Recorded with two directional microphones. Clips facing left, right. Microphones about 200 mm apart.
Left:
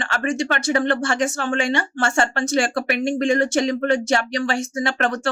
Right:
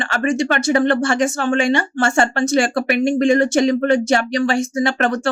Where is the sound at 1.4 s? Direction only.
45° right (ahead or behind).